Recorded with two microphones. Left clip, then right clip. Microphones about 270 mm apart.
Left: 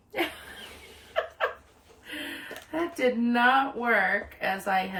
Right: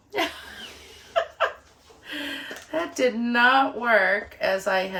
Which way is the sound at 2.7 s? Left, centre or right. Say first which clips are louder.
Right 3 dB; centre.